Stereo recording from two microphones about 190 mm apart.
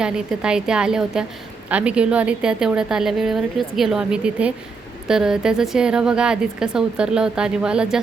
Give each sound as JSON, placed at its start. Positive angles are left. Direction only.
{"t": 0.0, "sound": "a woman's voice", "side_deg": -5}